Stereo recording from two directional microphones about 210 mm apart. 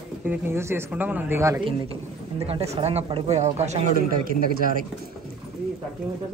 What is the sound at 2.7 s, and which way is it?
Speech, 30° right (ahead or behind).